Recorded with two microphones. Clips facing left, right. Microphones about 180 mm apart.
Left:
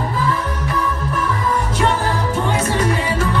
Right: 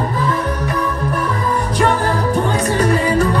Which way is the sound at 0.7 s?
35° right (ahead or behind).